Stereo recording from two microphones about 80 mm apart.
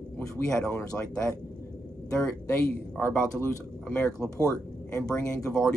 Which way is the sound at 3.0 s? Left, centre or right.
Left.